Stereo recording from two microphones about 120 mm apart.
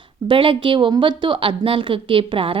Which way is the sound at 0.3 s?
45° right (ahead or behind).